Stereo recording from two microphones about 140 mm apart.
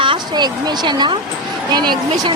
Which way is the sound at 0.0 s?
35° right (ahead or behind).